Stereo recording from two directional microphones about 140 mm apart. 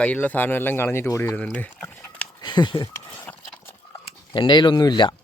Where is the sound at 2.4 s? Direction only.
30° left (ahead or behind).